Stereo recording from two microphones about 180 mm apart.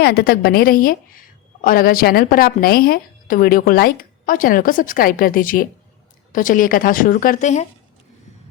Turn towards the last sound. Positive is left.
turn(degrees=40)  # may be behind; listen again after turning